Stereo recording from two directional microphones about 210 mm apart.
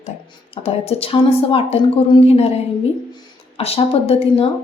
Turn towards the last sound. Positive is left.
turn(degrees=30)  # may be behind; listen again after turning